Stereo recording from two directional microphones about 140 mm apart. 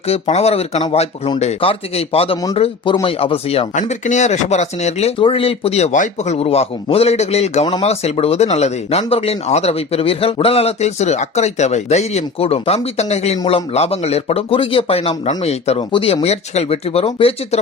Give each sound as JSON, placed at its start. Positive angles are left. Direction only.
{"t": 0.1, "sound": "speech", "side_deg": 50}
{"t": 3.8, "sound": "speech", "side_deg": 60}
{"t": 5.2, "sound": "speech", "side_deg": 40}
{"t": 15.9, "sound": "speech", "side_deg": 35}